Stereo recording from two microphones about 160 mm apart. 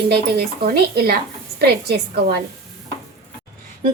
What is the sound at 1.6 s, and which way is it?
Speech, 90° right.